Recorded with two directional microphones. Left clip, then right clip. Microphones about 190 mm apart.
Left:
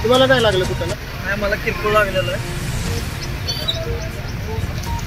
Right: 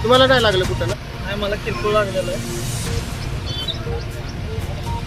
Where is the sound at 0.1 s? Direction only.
Centre (ahead or behind).